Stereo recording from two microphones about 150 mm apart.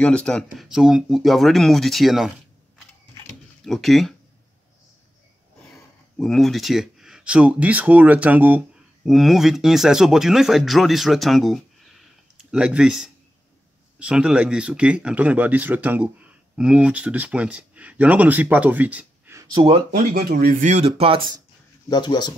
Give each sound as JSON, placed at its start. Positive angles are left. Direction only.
{"t": 0.0, "sound": "speech", "side_deg": 5}
{"t": 3.6, "sound": "speech", "side_deg": 0}
{"t": 6.1, "sound": "speech", "side_deg": 0}
{"t": 19.6, "sound": "speech", "side_deg": -25}
{"t": 20.1, "sound": "speech", "side_deg": -75}
{"t": 21.8, "sound": "speech", "side_deg": 25}